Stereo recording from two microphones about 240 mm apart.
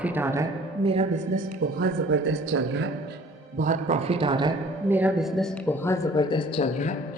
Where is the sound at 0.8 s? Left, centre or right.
Right.